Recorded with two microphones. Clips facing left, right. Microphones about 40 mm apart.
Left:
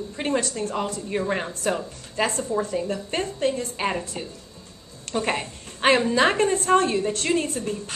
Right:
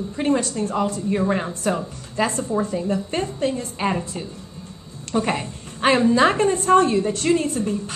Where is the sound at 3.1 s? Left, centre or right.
Left.